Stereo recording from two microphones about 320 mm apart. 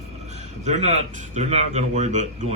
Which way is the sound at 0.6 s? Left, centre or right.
Right.